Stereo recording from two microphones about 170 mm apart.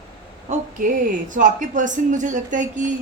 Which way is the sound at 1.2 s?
50° right (ahead or behind).